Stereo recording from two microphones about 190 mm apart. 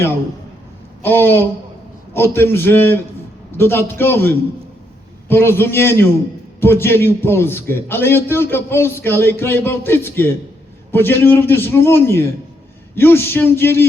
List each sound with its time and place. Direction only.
1.0 s a man's voice: 10° left (ahead or behind)